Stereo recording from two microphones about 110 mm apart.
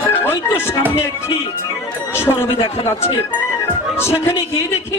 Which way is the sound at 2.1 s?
25° left (ahead or behind).